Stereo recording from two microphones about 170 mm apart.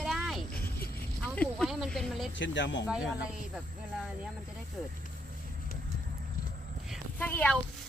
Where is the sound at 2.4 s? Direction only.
90° left.